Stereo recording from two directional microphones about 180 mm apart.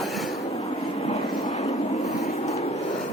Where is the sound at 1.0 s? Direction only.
35° left (ahead or behind).